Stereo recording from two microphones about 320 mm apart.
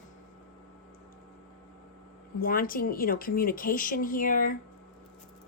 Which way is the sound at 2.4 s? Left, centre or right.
Left.